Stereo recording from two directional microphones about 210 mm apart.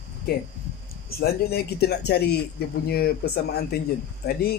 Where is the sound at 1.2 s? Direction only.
50° left (ahead or behind).